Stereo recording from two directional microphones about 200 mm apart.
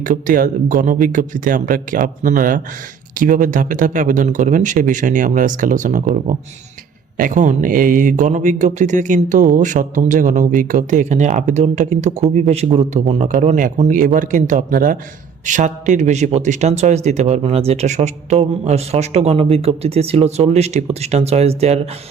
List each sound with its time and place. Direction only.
0.0 s speech: 40° right (ahead or behind)